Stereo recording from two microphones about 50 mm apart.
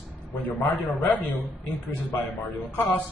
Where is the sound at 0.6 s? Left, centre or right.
Left.